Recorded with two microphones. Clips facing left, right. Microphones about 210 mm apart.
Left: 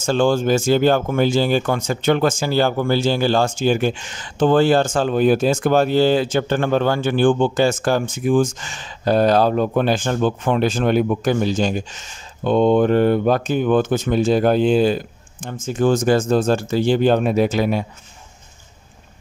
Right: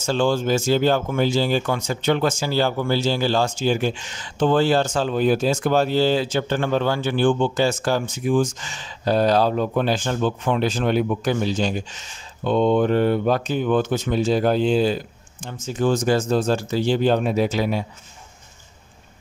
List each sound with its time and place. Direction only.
0.0 s speech: 50° left (ahead or behind)